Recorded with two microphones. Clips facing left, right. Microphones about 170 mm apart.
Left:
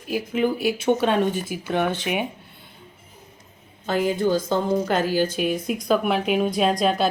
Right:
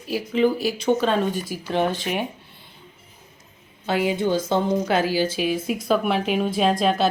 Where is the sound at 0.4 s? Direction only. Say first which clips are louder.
Right 2 dB; 5° left (ahead or behind).